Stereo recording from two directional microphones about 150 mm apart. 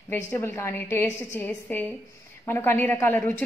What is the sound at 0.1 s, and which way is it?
A woman's voice, 15° left (ahead or behind).